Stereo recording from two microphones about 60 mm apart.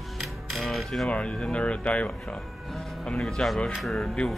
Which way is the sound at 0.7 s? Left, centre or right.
Centre.